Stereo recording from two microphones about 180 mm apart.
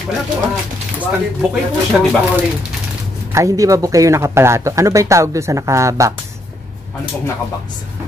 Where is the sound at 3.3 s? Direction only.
15° right (ahead or behind).